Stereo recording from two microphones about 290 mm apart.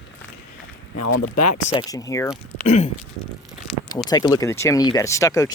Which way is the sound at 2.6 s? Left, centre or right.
Left.